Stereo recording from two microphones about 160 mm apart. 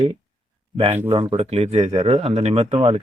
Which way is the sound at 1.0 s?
35° right (ahead or behind).